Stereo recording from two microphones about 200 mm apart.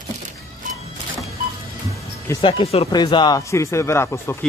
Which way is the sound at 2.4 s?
30° left (ahead or behind).